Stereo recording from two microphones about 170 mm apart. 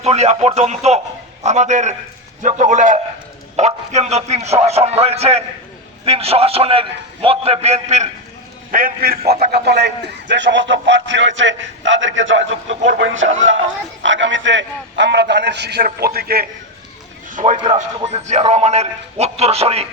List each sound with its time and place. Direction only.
0.0 s a man's voice: 40° right (ahead or behind)
8.7 s a man's voice: 60° right (ahead or behind)
9.4 s a man's voice: 70° right (ahead or behind)
17.2 s a sound: 45° right (ahead or behind)
17.7 s a man's voice: 40° right (ahead or behind)